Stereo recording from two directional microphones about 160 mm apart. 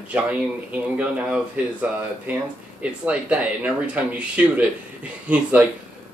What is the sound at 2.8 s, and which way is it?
Speech, 10° right (ahead or behind).